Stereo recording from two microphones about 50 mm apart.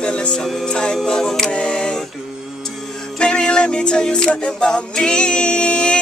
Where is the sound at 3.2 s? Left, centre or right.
Centre.